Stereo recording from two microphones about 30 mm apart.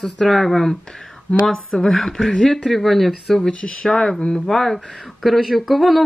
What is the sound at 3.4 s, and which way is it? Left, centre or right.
Speech, left.